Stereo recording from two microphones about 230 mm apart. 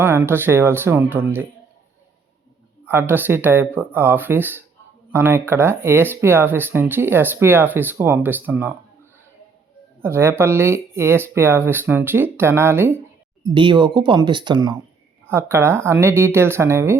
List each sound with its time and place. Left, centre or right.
0.0 s speech: centre
2.8 s speech: centre
10.0 s speech: centre
13.4 s speech: centre